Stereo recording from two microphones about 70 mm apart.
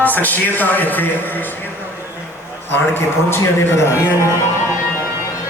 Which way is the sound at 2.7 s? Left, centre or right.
Left.